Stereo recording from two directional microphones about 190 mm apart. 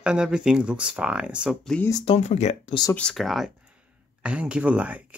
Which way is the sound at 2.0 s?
35° left (ahead or behind).